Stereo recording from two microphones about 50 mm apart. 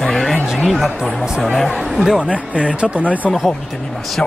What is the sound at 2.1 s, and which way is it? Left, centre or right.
Speech, right.